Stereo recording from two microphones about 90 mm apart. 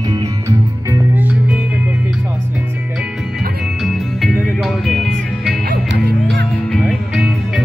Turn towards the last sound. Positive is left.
turn(degrees=-5)  # may be behind; listen again after turning